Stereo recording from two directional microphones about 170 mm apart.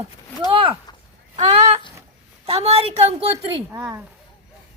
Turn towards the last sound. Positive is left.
turn(degrees=-10)  # may be behind; listen again after turning